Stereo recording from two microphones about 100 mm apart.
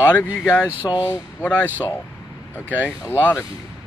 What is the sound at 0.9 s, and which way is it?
Speech, 35° left (ahead or behind).